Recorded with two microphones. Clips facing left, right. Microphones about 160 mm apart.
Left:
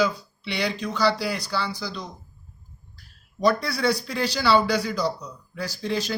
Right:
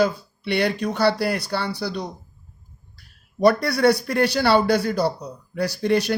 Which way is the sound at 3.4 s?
65° right (ahead or behind).